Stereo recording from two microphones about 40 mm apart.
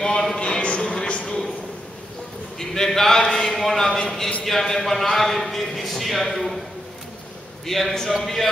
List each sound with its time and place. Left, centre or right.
0.0 s a sound: centre
0.8 s music: left
2.7 s a man's voice: centre
7.6 s a man's voice: centre